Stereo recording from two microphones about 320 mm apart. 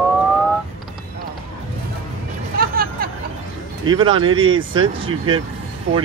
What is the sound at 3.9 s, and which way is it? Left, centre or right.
Speech, centre.